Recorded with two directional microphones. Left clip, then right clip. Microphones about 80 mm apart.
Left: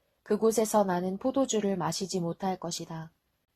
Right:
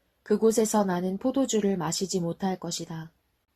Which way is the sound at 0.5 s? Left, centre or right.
Left.